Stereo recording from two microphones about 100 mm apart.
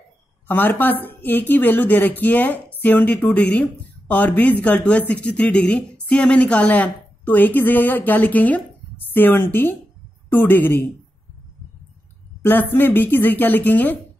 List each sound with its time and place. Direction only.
0.5 s a woman's voice: 20° left (ahead or behind)
12.4 s a woman's voice: 20° left (ahead or behind)